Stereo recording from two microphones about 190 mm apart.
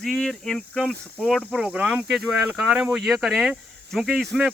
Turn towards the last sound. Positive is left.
turn(degrees=0)  # may be behind; listen again after turning